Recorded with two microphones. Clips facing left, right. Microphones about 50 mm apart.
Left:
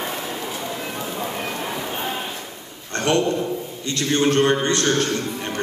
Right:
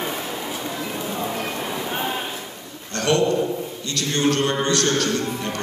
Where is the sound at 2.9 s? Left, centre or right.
Left.